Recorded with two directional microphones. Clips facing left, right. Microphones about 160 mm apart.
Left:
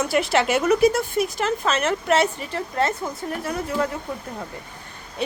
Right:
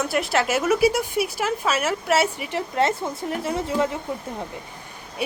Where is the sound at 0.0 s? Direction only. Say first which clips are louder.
Left 2 dB; centre (ahead or behind).